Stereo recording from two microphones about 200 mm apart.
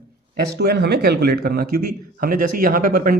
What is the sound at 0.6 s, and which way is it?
A man's voice, 55° right (ahead or behind).